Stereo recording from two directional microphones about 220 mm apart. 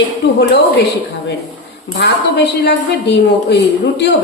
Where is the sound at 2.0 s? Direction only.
50° left (ahead or behind).